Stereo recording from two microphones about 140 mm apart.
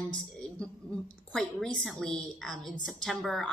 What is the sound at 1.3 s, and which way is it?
A woman's voice, 5° left (ahead or behind).